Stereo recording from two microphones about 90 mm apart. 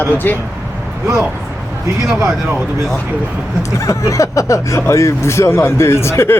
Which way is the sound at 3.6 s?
35° left (ahead or behind).